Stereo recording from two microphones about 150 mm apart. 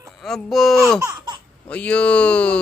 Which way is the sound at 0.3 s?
Centre (ahead or behind).